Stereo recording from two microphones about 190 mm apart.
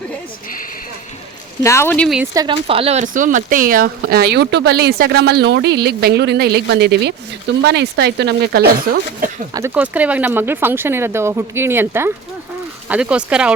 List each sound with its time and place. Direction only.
1.6 s speech: 15° left (ahead or behind)
2.3 s speech: 20° right (ahead or behind)
2.6 s speech: 30° right (ahead or behind); by 3.9 s 50° right (ahead or behind)
4.0 s a woman's voice: 60° right (ahead or behind)
9.5 s speech: 15° right (ahead or behind)